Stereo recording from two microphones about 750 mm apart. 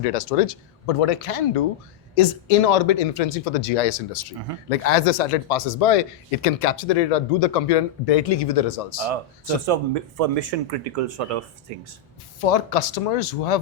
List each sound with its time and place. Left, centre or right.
0.1 s speech: left
9.6 s speech: right
12.5 s speech: left